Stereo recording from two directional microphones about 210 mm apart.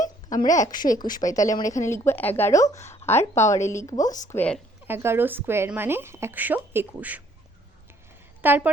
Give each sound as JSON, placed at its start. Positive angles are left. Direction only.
{"t": 0.0, "sound": "a sound", "side_deg": 35}
{"t": 0.4, "sound": "a woman's voice", "side_deg": 15}
{"t": 4.9, "sound": "a woman's voice", "side_deg": -10}
{"t": 8.4, "sound": "a woman's voice", "side_deg": -10}